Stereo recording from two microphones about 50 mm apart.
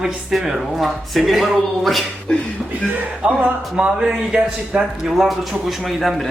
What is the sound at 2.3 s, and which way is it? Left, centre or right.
Speech, left.